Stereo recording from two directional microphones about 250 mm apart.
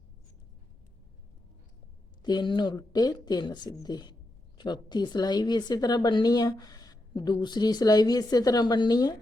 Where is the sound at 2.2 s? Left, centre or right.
Centre.